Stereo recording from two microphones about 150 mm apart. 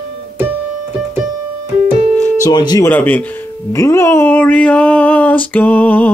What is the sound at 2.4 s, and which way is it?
Speech, 30° left (ahead or behind).